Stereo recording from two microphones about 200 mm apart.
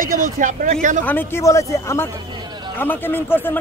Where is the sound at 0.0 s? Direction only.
40° right (ahead or behind).